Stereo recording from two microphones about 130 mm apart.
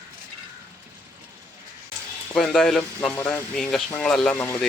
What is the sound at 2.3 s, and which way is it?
Speech, 5° left (ahead or behind).